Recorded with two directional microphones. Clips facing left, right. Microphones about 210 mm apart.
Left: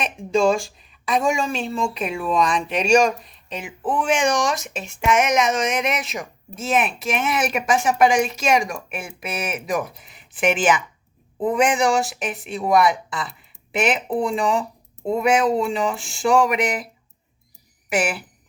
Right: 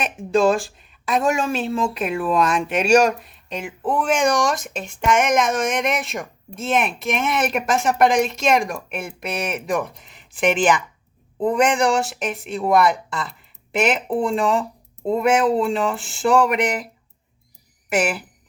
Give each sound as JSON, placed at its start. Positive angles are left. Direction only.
{"t": 0.0, "sound": "speech", "side_deg": 0}